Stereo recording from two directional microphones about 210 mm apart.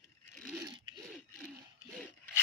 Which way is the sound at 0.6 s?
20° right (ahead or behind).